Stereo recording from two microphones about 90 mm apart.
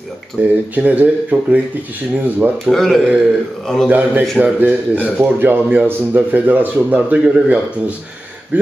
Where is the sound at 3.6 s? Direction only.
5° left (ahead or behind).